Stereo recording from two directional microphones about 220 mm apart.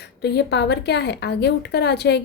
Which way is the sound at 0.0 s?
50° left (ahead or behind).